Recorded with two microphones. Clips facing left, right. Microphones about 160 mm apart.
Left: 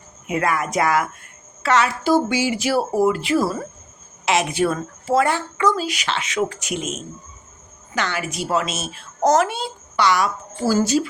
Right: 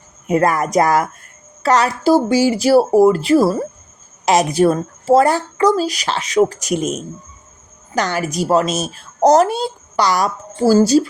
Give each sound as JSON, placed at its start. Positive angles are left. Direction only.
{"t": 0.3, "sound": "speech", "side_deg": -40}